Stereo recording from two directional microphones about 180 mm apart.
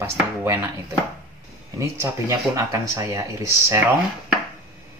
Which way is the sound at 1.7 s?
15° right (ahead or behind).